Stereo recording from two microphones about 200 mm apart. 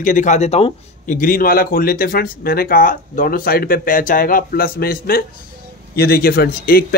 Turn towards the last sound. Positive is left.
turn(degrees=50)  # may be behind; listen again after turning